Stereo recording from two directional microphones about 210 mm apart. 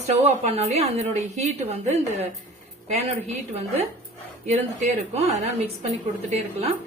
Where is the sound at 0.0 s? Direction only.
30° right (ahead or behind).